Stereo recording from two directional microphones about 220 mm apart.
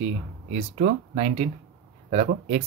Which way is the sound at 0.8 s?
35° right (ahead or behind).